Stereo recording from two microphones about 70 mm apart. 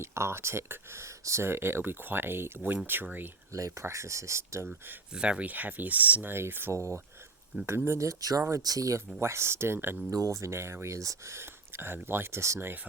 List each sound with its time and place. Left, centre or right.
0.0 s speech: right
2.6 s speech: centre
3.5 s speech: right
5.1 s speech: centre
6.3 s speech: right
6.7 s speech: right
9.2 s speech: right
10.1 s speech: right